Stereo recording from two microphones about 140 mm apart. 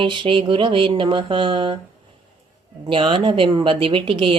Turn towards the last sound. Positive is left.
turn(degrees=-40)  # may be behind; listen again after turning